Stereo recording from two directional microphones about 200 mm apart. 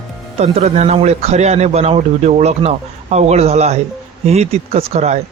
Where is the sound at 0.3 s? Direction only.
30° right (ahead or behind).